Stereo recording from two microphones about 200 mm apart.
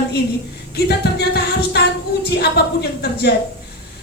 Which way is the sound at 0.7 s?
55° left (ahead or behind).